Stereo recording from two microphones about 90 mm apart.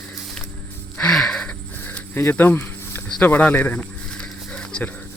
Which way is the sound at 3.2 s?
20° left (ahead or behind).